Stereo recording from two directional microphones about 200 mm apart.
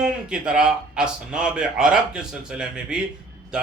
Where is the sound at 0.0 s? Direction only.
5° right (ahead or behind).